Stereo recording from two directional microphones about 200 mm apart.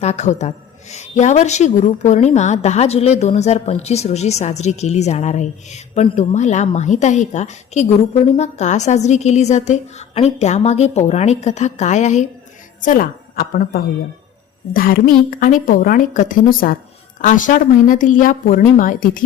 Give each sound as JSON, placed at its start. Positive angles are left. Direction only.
{"t": 0.0, "sound": "a woman's voice", "side_deg": 35}